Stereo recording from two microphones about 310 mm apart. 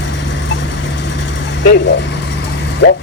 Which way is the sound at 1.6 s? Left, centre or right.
Left.